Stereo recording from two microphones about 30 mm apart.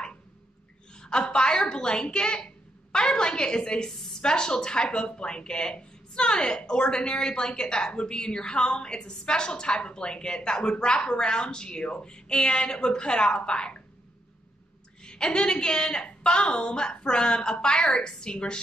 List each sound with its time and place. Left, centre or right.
0.9 s a woman's voice: left
3.9 s a sound: centre
4.2 s a woman's voice: left
15.0 s a woman's voice: left